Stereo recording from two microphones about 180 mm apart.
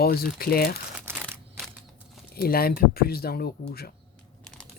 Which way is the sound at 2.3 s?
55° left (ahead or behind).